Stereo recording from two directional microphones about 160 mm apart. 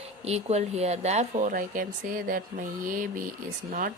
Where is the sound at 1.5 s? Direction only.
60° right (ahead or behind).